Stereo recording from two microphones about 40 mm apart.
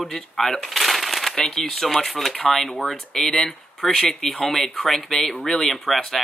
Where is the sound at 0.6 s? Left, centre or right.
Centre.